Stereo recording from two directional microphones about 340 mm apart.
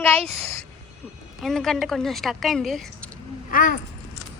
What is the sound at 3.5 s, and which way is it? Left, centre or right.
Speech, left.